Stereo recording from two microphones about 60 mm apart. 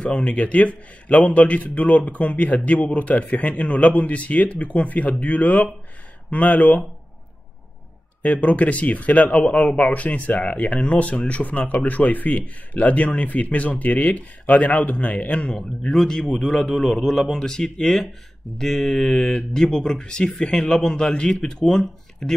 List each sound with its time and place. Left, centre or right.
0.0 s speech: centre
8.2 s speech: left
15.4 s a man's voice: centre